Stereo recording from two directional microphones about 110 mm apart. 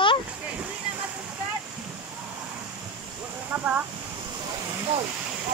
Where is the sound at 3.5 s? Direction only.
15° right (ahead or behind).